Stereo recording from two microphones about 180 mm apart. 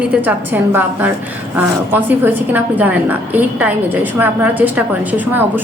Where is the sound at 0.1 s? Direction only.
10° right (ahead or behind).